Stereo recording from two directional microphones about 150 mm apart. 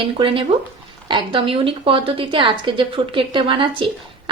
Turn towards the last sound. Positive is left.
turn(degrees=-35)  # may be behind; listen again after turning